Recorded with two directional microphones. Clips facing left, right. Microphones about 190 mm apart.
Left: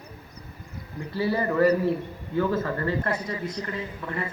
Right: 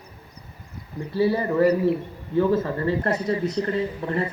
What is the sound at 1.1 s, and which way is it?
A man's voice, 25° right (ahead or behind).